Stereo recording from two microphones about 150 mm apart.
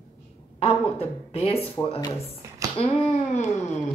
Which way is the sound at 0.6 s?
40° left (ahead or behind).